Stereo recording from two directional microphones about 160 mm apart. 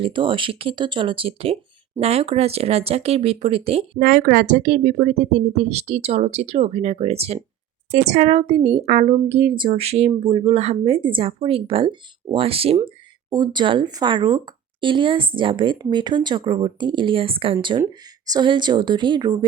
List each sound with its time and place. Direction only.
0.0 s speech: 30° right (ahead or behind)
4.0 s speech: 60° right (ahead or behind); by 19.5 s 25° right (ahead or behind)